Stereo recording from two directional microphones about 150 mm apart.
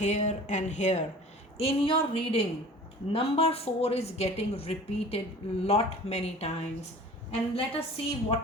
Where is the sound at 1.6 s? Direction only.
40° left (ahead or behind).